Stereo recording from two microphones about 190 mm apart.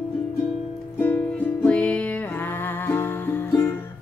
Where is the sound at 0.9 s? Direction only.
10° left (ahead or behind).